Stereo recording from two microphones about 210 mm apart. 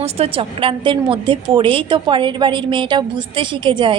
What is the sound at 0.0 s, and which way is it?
A woman's voice, 30° right (ahead or behind).